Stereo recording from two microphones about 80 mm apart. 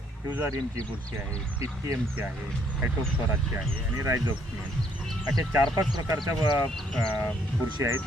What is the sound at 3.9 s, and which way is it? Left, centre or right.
Speech, right.